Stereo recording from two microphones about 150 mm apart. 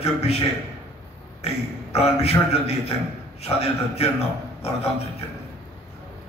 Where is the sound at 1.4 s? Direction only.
45° left (ahead or behind).